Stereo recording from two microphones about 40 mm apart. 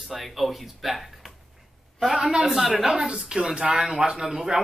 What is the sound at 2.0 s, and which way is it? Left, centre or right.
Speech, centre.